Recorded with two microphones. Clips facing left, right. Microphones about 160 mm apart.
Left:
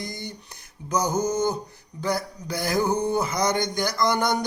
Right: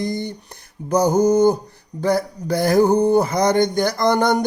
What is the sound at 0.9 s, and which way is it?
Music, 55° right (ahead or behind).